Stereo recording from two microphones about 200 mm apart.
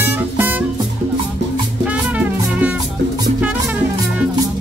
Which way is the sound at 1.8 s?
5° right (ahead or behind).